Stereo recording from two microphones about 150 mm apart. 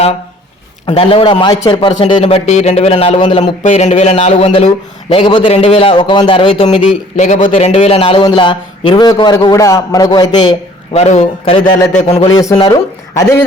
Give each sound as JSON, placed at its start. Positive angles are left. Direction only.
{"t": 0.9, "sound": "a man's voice", "side_deg": 40}
{"t": 2.5, "sound": "speech", "side_deg": 50}
{"t": 3.4, "sound": "a man's voice", "side_deg": 50}
{"t": 10.9, "sound": "a man's voice", "side_deg": 45}
{"t": 12.3, "sound": "a man's voice", "side_deg": 20}